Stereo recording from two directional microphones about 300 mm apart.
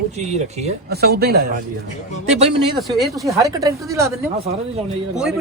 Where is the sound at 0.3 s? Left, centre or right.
Right.